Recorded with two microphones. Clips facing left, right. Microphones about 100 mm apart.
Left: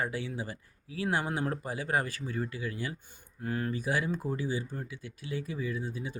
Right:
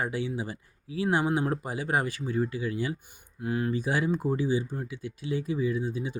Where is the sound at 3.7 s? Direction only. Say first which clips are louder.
Right 4 dB; 25° right (ahead or behind).